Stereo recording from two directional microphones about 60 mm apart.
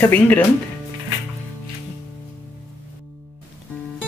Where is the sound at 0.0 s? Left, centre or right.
Left.